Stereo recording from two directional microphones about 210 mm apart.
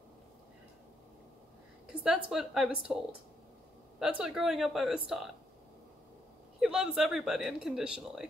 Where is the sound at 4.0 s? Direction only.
Centre (ahead or behind).